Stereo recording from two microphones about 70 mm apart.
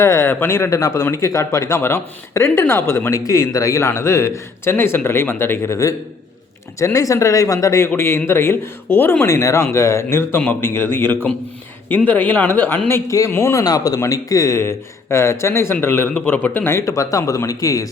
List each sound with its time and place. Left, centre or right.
0.0 s a man's voice: left
3.1 s a man's voice: left
7.9 s a man's voice: left
9.2 s a man's voice: left
13.1 s speech: left
14.0 s a man's voice: left
16.7 s speech: left